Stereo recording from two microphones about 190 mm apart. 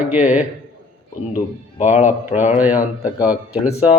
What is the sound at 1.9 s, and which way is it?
Speech, 35° left (ahead or behind).